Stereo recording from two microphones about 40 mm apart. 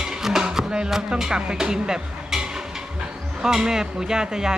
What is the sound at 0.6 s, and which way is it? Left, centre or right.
Speech, centre.